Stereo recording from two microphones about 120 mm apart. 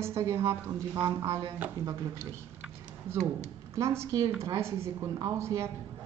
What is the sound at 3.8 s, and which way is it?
A woman's voice, 25° right (ahead or behind).